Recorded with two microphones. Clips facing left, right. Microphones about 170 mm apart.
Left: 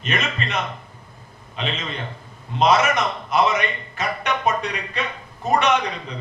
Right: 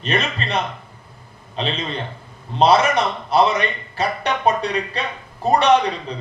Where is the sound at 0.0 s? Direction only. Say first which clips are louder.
Right 3 dB; 35° right (ahead or behind).